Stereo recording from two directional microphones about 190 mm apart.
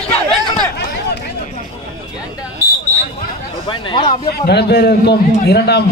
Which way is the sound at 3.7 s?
25° left (ahead or behind).